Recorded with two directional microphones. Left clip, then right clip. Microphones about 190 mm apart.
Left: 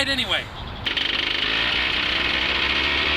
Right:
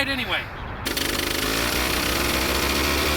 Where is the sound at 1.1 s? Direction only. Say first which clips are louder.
Left 2 dB; 15° right (ahead or behind).